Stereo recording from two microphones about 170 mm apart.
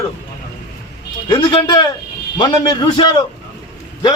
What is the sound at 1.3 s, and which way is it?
Speech, 30° left (ahead or behind).